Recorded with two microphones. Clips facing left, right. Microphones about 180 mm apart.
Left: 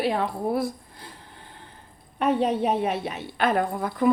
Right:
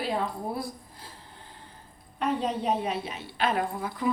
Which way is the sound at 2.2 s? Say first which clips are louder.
Left 6 dB; 65° left (ahead or behind).